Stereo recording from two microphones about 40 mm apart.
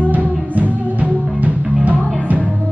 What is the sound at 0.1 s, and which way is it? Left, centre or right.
Music, right.